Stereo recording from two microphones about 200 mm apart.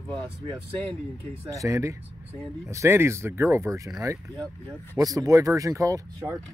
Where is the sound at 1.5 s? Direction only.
15° right (ahead or behind).